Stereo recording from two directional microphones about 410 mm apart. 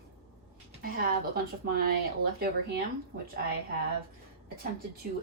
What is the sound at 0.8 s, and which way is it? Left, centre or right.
Speech, right.